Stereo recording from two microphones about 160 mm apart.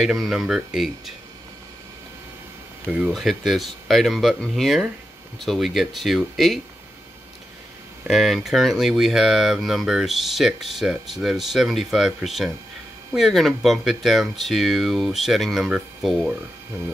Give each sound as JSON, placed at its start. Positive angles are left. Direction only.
{"t": 0.0, "sound": "speech", "side_deg": 0}
{"t": 2.9, "sound": "speech", "side_deg": -5}
{"t": 8.1, "sound": "speech", "side_deg": 0}